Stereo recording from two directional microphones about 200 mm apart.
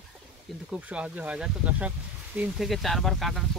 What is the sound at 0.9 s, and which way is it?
Speech, 5° right (ahead or behind).